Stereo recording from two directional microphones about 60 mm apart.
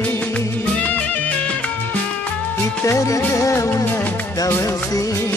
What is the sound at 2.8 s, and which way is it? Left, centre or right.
Music, left.